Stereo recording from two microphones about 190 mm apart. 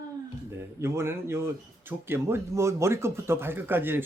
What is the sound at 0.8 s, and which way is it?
Speech, 15° right (ahead or behind).